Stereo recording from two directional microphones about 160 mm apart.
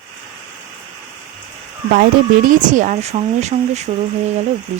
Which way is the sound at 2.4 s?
50° right (ahead or behind).